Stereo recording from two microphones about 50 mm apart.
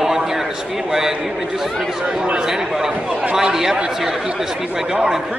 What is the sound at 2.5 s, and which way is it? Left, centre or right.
A man's voice, centre.